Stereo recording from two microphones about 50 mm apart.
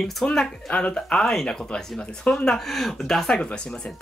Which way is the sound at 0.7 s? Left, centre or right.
Left.